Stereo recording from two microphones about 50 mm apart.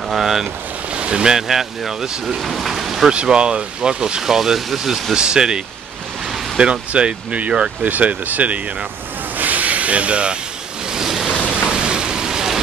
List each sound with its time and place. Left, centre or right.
0.1 s speech: centre
0.9 s speech: centre
2.5 s rain: centre
3.1 s speech: centre
6.6 s speech: right
9.4 s hiss: right
10.9 s pink noise: centre
11.4 s a sound: centre